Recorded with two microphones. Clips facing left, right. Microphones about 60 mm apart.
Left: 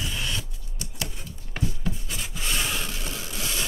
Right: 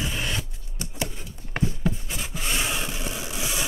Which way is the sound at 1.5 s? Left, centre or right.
Right.